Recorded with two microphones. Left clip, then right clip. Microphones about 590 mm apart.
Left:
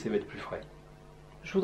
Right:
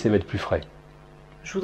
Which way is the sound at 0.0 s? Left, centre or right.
Right.